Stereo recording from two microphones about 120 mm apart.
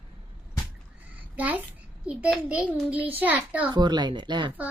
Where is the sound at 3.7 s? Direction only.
40° right (ahead or behind).